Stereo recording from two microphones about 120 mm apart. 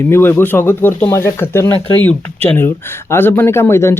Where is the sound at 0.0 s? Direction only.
20° left (ahead or behind).